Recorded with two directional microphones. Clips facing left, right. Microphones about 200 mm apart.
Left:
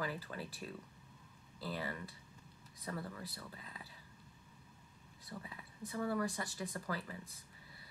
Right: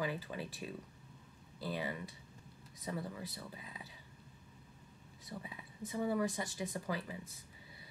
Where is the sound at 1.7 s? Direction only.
20° right (ahead or behind).